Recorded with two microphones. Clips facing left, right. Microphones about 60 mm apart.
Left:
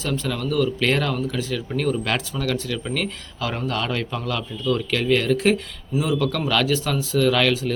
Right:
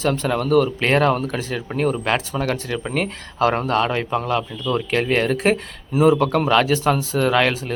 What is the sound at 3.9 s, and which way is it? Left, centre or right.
Speech, right.